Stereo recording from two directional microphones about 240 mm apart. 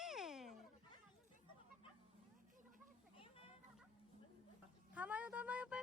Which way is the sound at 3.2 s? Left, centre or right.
Left.